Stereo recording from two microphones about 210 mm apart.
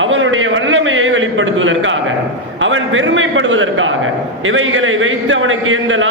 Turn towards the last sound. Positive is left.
turn(degrees=-70)  # may be behind; listen again after turning